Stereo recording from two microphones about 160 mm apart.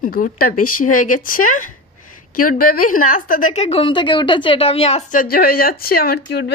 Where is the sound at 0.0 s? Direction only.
60° left (ahead or behind); by 5.0 s 40° left (ahead or behind).